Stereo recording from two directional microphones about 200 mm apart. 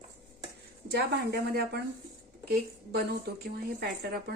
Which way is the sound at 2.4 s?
50° right (ahead or behind).